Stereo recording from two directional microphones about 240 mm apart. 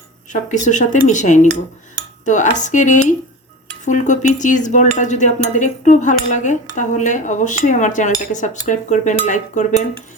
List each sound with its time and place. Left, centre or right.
0.3 s cutlery: left